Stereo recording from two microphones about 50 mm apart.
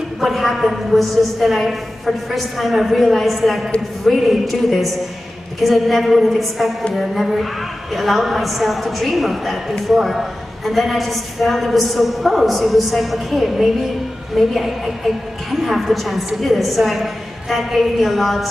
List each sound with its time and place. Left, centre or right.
0.2 s a woman's voice: centre